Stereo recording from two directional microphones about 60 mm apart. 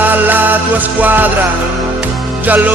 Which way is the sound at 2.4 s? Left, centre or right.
Right.